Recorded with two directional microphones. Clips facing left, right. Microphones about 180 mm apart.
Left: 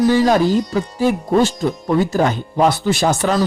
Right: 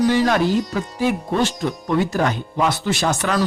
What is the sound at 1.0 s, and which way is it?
Speech, 40° left (ahead or behind).